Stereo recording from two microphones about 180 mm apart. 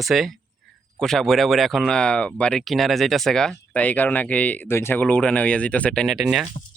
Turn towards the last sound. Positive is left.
turn(degrees=-5)  # may be behind; listen again after turning